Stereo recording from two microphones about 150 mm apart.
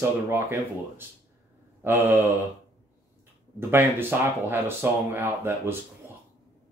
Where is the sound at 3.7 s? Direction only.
15° right (ahead or behind).